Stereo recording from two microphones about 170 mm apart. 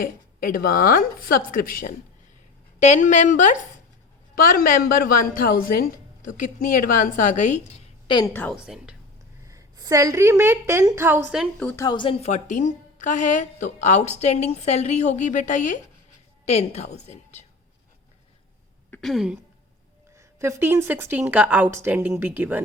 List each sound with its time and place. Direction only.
0.0 s a woman's voice: 55° left (ahead or behind)
2.8 s a woman's voice: 45° left (ahead or behind)
8.0 s a woman's voice: 25° left (ahead or behind)
8.3 s a woman's voice: 10° left (ahead or behind)
8.5 s speech: 5° right (ahead or behind)
9.5 s speech: 20° right (ahead or behind)
11.6 s a woman's voice: 15° left (ahead or behind)
11.9 s speech: 30° left (ahead or behind)
12.2 s a woman's voice: 45° left (ahead or behind)
18.9 s a woman's voice: centre (ahead or behind)
20.1 s speech: 15° right (ahead or behind)